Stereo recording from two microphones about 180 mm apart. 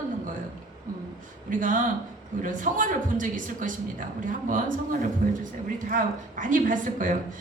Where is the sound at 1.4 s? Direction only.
45° right (ahead or behind).